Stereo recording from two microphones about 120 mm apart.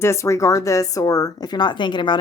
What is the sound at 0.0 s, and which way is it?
Speech, 25° left (ahead or behind).